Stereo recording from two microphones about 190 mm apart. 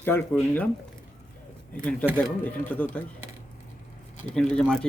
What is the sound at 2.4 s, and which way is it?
Speech, 5° left (ahead or behind).